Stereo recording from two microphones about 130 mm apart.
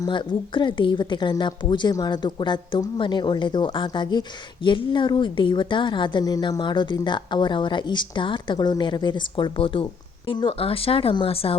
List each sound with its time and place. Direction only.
0.0 s a woman's voice: 40° left (ahead or behind)